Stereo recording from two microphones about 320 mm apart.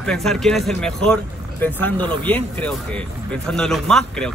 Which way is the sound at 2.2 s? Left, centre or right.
Centre.